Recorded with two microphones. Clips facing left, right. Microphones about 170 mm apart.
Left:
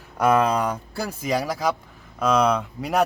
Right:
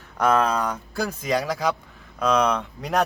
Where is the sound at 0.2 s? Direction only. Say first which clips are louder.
Left 2 dB; 10° left (ahead or behind).